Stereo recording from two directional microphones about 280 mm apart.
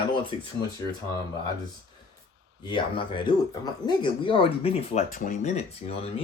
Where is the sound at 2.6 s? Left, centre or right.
Centre.